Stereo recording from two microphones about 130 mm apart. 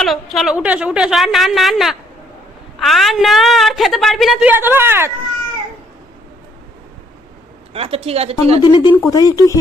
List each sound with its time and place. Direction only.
0.0 s a woman's voice: centre (ahead or behind)
0.5 s a woman's voice: 10° right (ahead or behind)
4.4 s a woman's voice: 15° right (ahead or behind)
7.7 s a woman's voice: 50° right (ahead or behind)
8.6 s speech: 35° left (ahead or behind)